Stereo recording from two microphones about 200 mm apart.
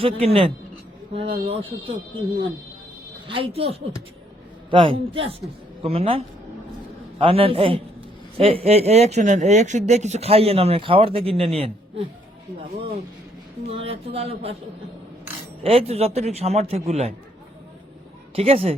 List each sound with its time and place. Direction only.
0.0 s speech: 30° right (ahead or behind)
3.2 s speech: 30° right (ahead or behind)
4.7 s a man's voice: 25° right (ahead or behind)
13.7 s speech: 30° right (ahead or behind)
15.6 s speech: 30° right (ahead or behind)
18.3 s speech: 30° right (ahead or behind)